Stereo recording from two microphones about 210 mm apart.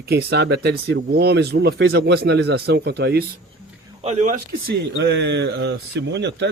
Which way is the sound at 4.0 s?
30° right (ahead or behind).